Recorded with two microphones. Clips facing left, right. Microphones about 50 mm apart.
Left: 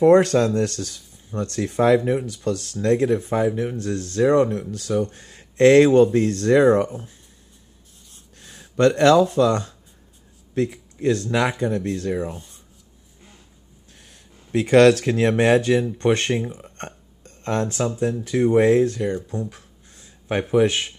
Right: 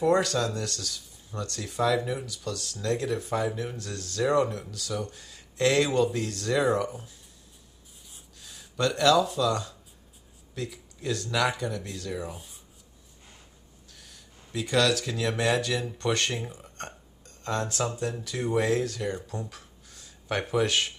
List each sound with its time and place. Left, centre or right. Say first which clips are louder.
0.0 s speech: left 10 dB; left
8.4 s speech: left 10 dB; left
12.3 s speech: left 7 dB; centre
13.9 s speech: left 3 dB; left
15.8 s speech: left 8 dB; left
16.4 s speech: left 8 dB; centre
16.7 s a sound: left 4 dB; left
18.2 s speech: left 11 dB; left
19.5 s a sound: left 1 dB; left
20.5 s speech: left 7 dB; centre